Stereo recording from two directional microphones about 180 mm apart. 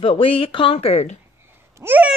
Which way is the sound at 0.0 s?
30° left (ahead or behind).